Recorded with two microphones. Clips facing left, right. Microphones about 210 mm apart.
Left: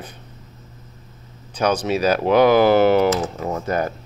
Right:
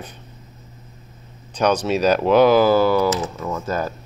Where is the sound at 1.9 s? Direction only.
55° left (ahead or behind).